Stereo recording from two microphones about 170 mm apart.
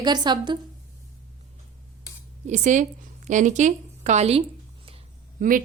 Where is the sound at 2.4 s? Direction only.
45° right (ahead or behind).